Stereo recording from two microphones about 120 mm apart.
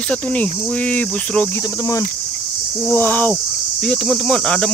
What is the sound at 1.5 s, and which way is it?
Speech, 30° left (ahead or behind).